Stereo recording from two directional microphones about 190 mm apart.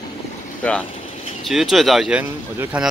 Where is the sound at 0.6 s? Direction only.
5° left (ahead or behind); by 2.9 s 10° right (ahead or behind).